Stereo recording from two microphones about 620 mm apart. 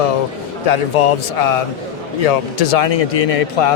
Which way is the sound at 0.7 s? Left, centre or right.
Left.